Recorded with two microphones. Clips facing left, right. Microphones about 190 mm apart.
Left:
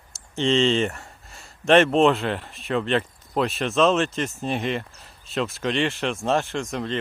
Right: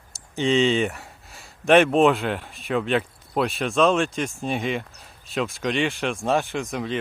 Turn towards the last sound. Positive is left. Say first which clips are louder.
# even
turn(degrees=0)  # may be behind; listen again after turning